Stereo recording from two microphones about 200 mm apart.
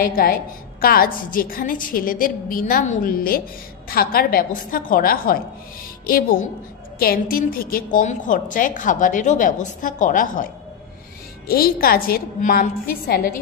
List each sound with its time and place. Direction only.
0.0 s a woman's voice: 45° left (ahead or behind)